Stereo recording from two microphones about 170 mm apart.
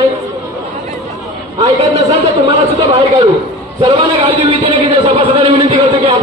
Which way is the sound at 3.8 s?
30° right (ahead or behind).